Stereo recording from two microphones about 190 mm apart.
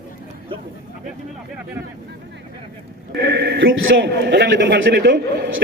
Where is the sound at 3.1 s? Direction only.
60° right (ahead or behind).